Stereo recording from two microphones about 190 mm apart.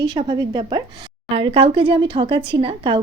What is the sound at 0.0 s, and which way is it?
Speech, 25° right (ahead or behind).